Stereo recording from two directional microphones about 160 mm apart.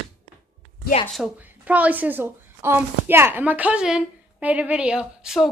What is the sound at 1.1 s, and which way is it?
A woman's voice, 5° right (ahead or behind).